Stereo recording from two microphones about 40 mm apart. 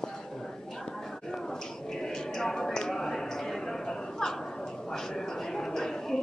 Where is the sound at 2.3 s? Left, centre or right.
Centre.